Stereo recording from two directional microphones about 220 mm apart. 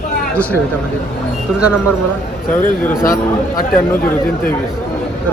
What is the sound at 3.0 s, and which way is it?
Speech, 40° left (ahead or behind).